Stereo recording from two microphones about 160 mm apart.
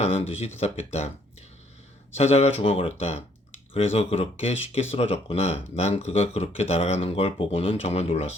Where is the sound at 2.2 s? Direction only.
40° left (ahead or behind).